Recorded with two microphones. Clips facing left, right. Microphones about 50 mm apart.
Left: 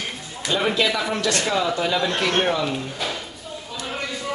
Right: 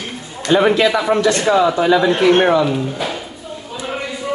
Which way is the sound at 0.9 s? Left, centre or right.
Right.